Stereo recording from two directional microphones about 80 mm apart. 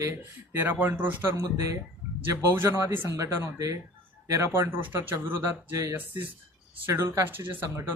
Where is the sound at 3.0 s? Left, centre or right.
Right.